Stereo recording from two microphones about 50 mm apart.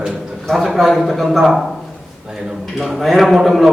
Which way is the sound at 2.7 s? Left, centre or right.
Centre.